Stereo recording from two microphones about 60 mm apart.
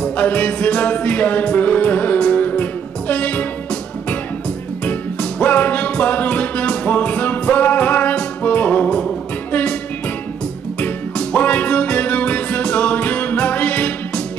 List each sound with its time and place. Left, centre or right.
0.0 s music: left
5.4 s music: left
10.8 s music: left